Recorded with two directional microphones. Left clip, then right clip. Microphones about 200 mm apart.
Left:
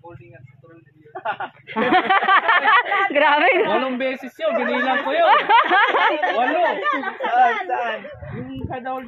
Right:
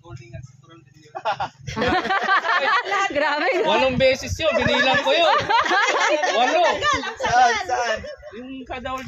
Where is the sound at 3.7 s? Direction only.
90° right.